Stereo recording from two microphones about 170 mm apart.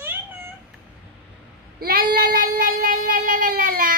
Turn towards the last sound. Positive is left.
turn(degrees=-55)  # may be behind; listen again after turning